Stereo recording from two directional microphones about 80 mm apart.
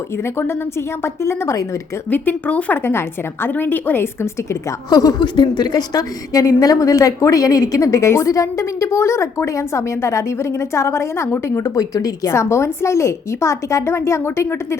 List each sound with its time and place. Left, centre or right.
1.0 s a woman's voice: left
2.0 s a woman's voice: left
2.7 s a woman's voice: left
4.9 s a woman's voice: left
5.2 s a woman's voice: left
11.7 s a woman's voice: left
12.3 s a woman's voice: left